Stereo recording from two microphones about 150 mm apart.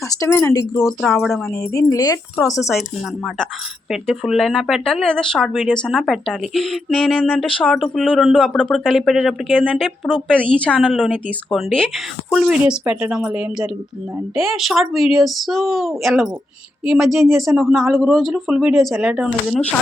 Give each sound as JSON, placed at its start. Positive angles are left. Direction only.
{"t": 0.2, "sound": "speech", "side_deg": 15}
{"t": 0.9, "sound": "speech", "side_deg": 0}
{"t": 1.7, "sound": "speech", "side_deg": 20}
{"t": 4.0, "sound": "speech", "side_deg": 0}
{"t": 10.8, "sound": "speech", "side_deg": -5}